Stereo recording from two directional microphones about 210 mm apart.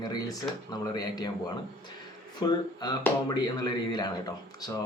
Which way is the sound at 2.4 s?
20° left (ahead or behind).